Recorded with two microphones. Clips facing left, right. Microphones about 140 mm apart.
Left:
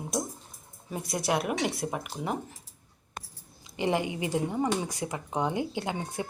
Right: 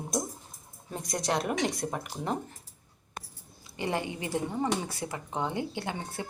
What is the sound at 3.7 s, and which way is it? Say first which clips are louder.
Speech: left 4 dB; 15° left (ahead or behind).